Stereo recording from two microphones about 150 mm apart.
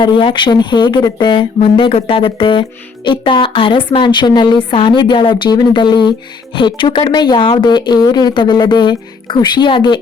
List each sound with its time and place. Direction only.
0.0 s speech: 35° left (ahead or behind)